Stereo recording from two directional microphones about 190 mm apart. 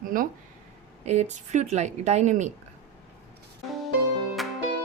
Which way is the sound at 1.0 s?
35° right (ahead or behind).